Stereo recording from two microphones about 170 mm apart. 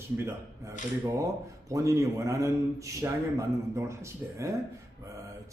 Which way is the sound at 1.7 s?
20° right (ahead or behind).